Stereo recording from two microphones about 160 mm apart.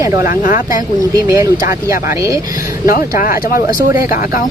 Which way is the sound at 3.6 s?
20° right (ahead or behind).